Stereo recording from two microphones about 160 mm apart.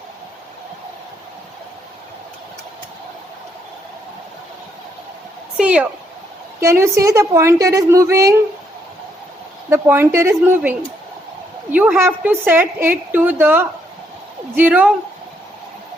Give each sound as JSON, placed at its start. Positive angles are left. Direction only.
{"t": 5.5, "sound": "a woman's voice", "side_deg": -5}
{"t": 9.6, "sound": "a woman's voice", "side_deg": -15}